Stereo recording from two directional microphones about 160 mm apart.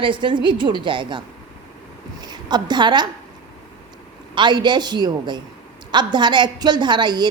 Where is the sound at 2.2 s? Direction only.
25° right (ahead or behind).